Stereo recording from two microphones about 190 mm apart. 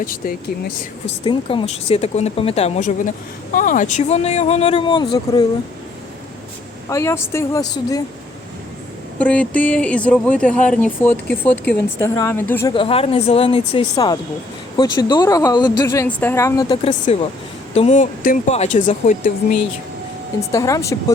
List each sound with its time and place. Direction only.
0.0 s speech: 50° left (ahead or behind)
1.0 s speech: 25° left (ahead or behind)
6.9 s speech: 15° left (ahead or behind)
9.1 s speech: 5° left (ahead or behind)
12.7 s speech: 30° left (ahead or behind)
16.8 s speech: 35° left (ahead or behind)
20.5 s speech: 15° left (ahead or behind)